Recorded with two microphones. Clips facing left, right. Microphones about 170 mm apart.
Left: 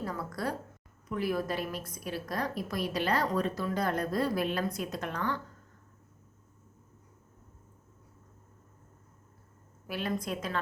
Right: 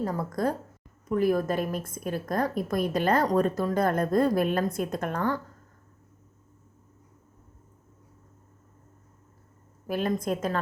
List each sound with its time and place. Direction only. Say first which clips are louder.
0.0 s a woman's voice: right 7 dB; 45° right (ahead or behind)
9.8 s a woman's voice: right 6 dB; 45° right (ahead or behind)